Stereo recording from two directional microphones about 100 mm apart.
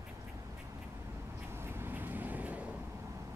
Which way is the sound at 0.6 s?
30° right (ahead or behind).